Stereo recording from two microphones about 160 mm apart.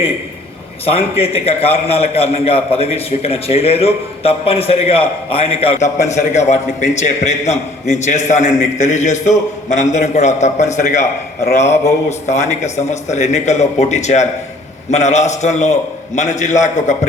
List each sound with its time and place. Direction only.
0.9 s a man's voice: 35° left (ahead or behind)